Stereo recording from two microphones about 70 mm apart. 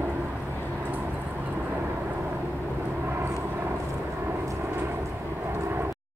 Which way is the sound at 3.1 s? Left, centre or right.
Right.